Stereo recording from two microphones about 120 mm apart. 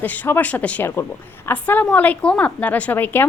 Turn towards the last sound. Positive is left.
turn(degrees=15)  # may be behind; listen again after turning